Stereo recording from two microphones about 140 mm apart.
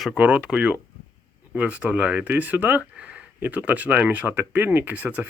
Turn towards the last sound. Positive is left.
turn(degrees=-10)  # may be behind; listen again after turning